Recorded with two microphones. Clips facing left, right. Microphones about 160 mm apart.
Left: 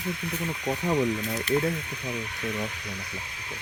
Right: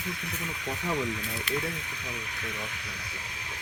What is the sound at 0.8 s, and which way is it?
Speech, 40° left (ahead or behind).